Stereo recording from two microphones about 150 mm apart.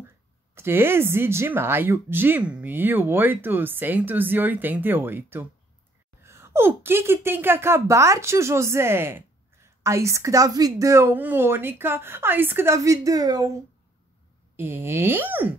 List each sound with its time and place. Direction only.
0.6 s a woman's voice: 15° right (ahead or behind)
14.6 s speech: 15° right (ahead or behind)